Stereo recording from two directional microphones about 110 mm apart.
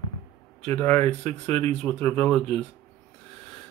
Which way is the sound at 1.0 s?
75° right (ahead or behind).